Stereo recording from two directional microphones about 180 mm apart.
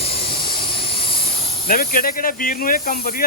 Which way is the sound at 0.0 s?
30° left (ahead or behind).